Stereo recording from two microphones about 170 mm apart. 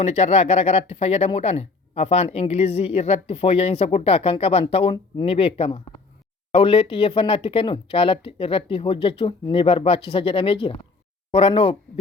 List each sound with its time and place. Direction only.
0.0 s speech: 40° left (ahead or behind)